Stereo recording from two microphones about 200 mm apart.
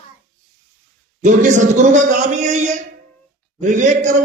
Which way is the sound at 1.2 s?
40° right (ahead or behind).